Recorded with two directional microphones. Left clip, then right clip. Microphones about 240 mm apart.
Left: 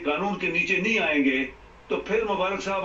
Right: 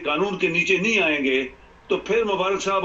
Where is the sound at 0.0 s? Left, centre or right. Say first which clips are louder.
Right 4 dB; right.